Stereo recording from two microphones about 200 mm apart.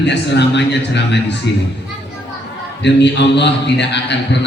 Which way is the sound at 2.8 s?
60° left (ahead or behind).